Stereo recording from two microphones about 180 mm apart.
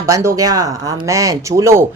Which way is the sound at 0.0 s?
15° right (ahead or behind).